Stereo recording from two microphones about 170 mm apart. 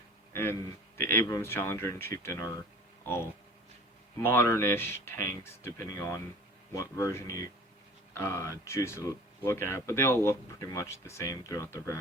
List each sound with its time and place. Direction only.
0.9 s speech: 15° left (ahead or behind)
4.3 s speech: 15° left (ahead or behind)